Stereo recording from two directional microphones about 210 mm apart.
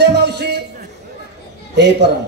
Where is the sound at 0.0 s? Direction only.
50° right (ahead or behind).